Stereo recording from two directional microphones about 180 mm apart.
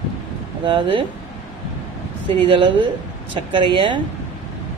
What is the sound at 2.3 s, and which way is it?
Speech, 25° right (ahead or behind).